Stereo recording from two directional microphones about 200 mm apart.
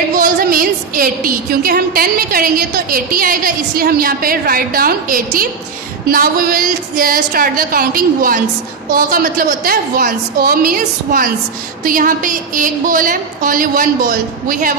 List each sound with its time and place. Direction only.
0.1 s a woman's voice: 45° right (ahead or behind)